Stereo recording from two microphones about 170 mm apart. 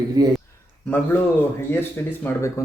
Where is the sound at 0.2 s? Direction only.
25° right (ahead or behind).